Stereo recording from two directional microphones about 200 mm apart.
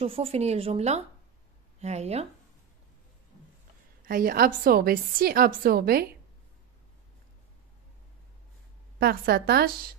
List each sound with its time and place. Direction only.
0.0 s speech: 30° right (ahead or behind)
4.0 s a woman's voice: 45° right (ahead or behind)
9.0 s a woman's voice: 50° right (ahead or behind)